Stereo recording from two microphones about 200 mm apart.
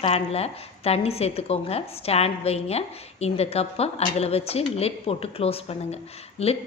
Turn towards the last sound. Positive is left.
turn(degrees=30)  # may be behind; listen again after turning